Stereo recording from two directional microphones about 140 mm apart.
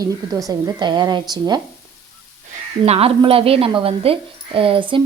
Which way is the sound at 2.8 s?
45° right (ahead or behind).